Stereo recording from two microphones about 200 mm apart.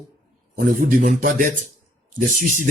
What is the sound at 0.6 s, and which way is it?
Speech, 45° right (ahead or behind).